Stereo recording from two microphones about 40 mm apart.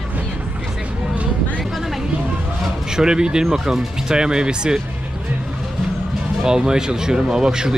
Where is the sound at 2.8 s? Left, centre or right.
Centre.